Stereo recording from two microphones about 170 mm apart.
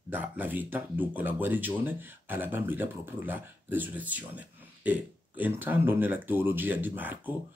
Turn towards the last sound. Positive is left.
turn(degrees=-10)  # may be behind; listen again after turning